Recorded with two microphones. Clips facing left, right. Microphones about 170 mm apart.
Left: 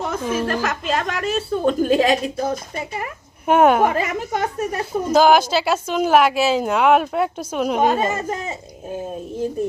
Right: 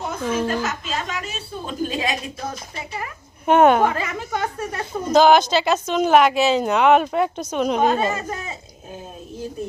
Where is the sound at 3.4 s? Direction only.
5° left (ahead or behind).